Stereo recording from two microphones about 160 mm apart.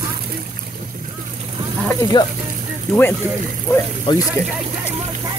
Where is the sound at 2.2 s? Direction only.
30° left (ahead or behind).